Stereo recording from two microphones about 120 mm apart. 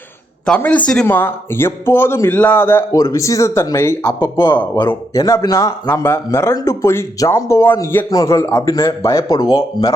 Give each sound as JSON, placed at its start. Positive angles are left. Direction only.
{"t": 0.4, "sound": "a man's voice", "side_deg": 10}
{"t": 2.9, "sound": "a man's voice", "side_deg": 30}